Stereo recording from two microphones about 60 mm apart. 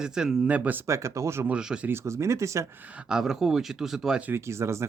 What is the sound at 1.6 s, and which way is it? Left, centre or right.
Speech, centre.